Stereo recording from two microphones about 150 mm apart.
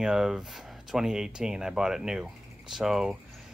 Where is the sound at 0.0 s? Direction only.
5° right (ahead or behind).